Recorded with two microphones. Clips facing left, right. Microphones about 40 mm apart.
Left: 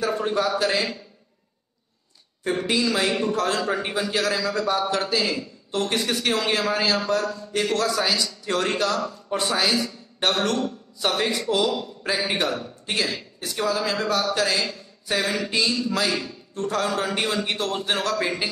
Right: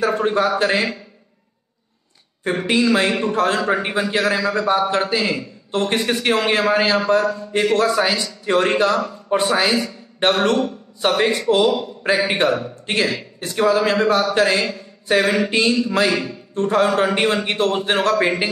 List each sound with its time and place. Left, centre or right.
0.0 s speech: right
2.4 s a man's voice: right